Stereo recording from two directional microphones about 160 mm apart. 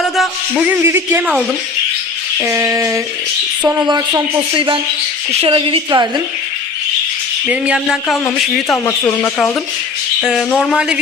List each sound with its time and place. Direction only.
0.0 s speech: centre (ahead or behind)
2.4 s a sound: 15° right (ahead or behind)
4.5 s a woman's voice: 30° right (ahead or behind)
7.4 s speech: 5° right (ahead or behind)
8.7 s speech: 15° left (ahead or behind)
10.2 s speech: centre (ahead or behind)